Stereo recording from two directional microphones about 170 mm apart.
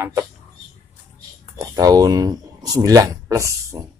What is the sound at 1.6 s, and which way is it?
Speech, 20° right (ahead or behind).